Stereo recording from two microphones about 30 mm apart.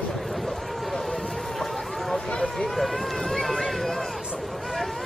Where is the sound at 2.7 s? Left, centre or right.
Centre.